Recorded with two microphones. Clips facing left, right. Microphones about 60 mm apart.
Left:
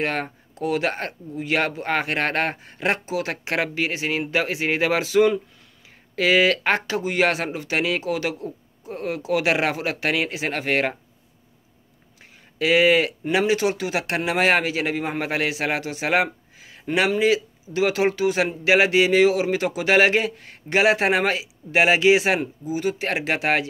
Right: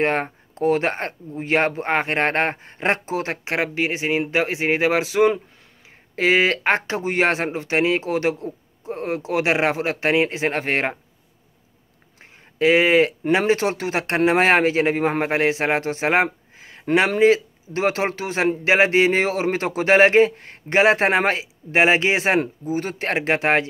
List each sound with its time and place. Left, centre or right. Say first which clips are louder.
0.0 s speech: right 4 dB; right
3.4 s speech: right 3 dB; right
12.2 s a sound: right 5 dB; right
13.3 s speech: left 3 dB; right